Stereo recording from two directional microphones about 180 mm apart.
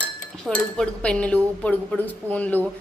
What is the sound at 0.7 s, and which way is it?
A woman's voice, 5° left (ahead or behind).